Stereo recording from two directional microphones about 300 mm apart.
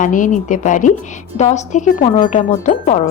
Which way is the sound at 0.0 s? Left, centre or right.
Left.